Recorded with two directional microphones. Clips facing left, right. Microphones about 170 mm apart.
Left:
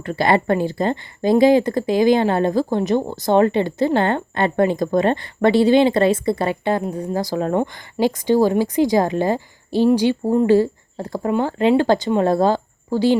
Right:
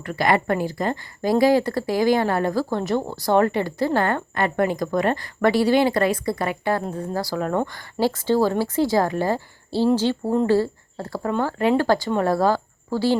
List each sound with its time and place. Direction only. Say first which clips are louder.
0.0 s a woman's voice: left 3 dB; 30° left (ahead or behind)
6.8 s a woman's voice: left 4 dB; 15° left (ahead or behind)